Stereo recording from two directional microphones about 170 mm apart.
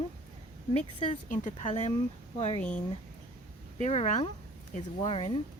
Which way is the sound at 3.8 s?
40° left (ahead or behind).